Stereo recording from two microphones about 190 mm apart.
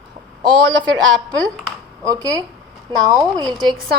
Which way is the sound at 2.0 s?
20° right (ahead or behind).